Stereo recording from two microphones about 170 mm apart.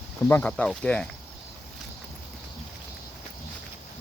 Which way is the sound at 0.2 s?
15° left (ahead or behind).